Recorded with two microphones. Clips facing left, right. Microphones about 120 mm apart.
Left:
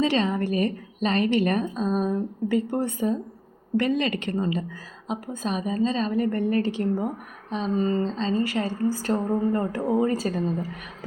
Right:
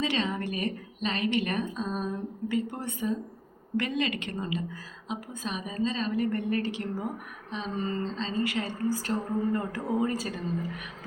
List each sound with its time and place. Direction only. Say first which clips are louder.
0.0 s speech: left 6 dB; 40° left (ahead or behind)